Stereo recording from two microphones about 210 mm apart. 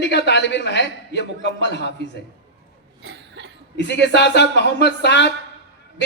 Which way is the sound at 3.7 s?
55° left (ahead or behind).